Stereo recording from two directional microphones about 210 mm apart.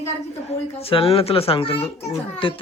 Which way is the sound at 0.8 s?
25° left (ahead or behind).